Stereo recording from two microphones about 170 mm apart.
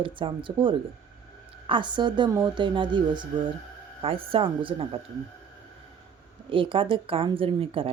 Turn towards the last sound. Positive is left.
turn(degrees=-30)  # may be behind; listen again after turning